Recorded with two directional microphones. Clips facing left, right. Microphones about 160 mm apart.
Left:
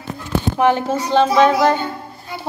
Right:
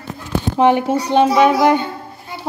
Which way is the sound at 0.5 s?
20° right (ahead or behind).